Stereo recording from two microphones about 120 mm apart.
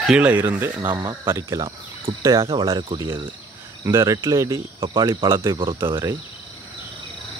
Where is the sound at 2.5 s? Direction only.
45° right (ahead or behind).